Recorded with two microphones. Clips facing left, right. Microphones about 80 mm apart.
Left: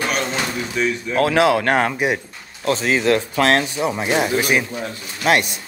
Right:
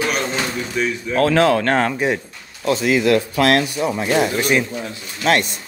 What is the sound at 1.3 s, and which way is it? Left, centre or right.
Speech, centre.